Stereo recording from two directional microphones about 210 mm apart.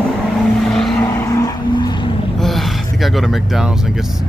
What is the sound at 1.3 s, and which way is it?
Vehicle, 20° left (ahead or behind).